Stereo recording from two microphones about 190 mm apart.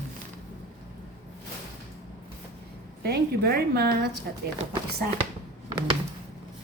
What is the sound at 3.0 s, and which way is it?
A woman's voice, 55° right (ahead or behind).